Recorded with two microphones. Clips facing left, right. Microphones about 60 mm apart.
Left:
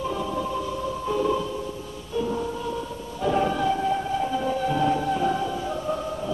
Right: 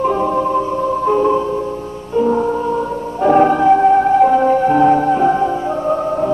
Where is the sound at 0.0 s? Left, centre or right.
Right.